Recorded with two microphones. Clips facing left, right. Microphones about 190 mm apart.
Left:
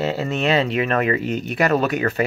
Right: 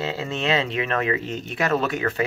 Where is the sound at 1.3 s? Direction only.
25° right (ahead or behind).